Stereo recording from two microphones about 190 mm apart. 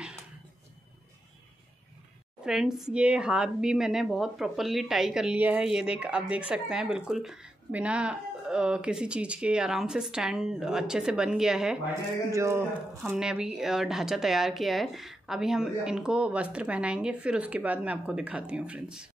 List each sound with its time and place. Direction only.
2.4 s a woman's voice: 5° right (ahead or behind)
12.3 s a woman's voice: 15° right (ahead or behind)